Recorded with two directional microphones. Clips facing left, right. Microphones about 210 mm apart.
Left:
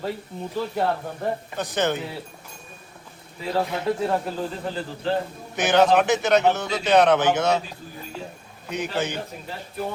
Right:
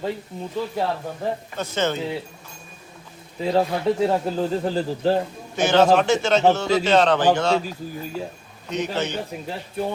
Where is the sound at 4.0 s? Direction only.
25° right (ahead or behind).